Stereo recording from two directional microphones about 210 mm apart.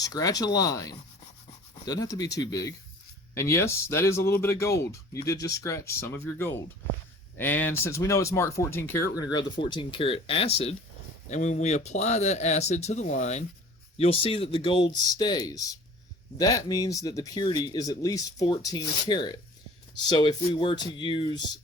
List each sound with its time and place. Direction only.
0.0 s speech: 15° left (ahead or behind)